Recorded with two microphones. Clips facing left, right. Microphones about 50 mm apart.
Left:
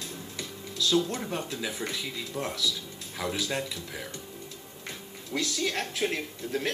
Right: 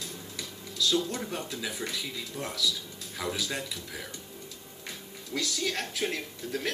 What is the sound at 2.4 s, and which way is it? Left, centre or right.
Speech, left.